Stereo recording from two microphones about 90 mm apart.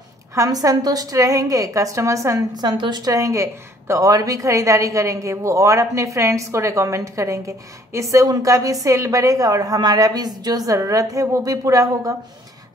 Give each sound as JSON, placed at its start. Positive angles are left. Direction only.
{"t": 0.3, "sound": "a woman's voice", "side_deg": -40}
{"t": 2.5, "sound": "a woman's voice", "side_deg": -55}